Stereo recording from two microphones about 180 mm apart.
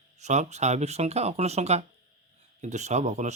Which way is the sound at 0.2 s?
40° right (ahead or behind).